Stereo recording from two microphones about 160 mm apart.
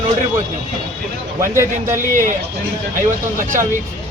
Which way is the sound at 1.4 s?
15° right (ahead or behind).